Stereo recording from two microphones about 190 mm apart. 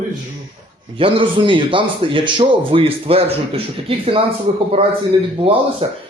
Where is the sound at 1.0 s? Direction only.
25° right (ahead or behind).